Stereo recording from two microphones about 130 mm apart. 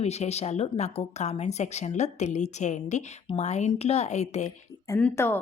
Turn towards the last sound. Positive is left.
turn(degrees=20)  # may be behind; listen again after turning